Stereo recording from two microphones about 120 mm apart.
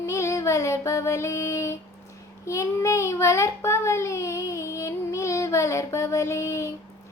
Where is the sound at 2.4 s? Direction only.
25° left (ahead or behind).